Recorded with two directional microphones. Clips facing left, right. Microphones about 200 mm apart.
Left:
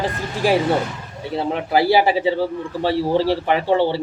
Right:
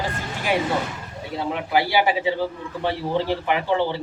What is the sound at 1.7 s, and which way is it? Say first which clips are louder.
A man's voice: left 4 dB; 35° left (ahead or behind).